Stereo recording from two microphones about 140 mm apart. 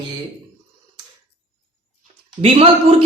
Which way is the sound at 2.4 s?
45° right (ahead or behind).